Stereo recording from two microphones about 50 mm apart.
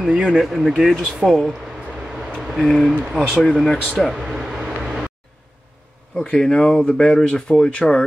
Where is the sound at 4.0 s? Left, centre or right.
Centre.